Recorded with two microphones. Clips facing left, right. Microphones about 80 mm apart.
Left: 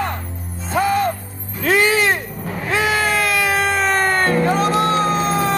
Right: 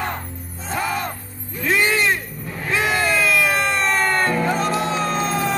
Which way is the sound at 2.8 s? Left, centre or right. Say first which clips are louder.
Left 1 dB; centre.